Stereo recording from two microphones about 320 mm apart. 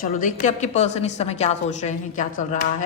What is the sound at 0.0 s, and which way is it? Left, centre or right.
A woman's voice, left.